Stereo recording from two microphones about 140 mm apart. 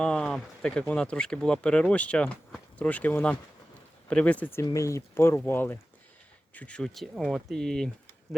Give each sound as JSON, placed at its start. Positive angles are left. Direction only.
{"t": 0.0, "sound": "speech", "side_deg": 5}
{"t": 4.6, "sound": "speech", "side_deg": 20}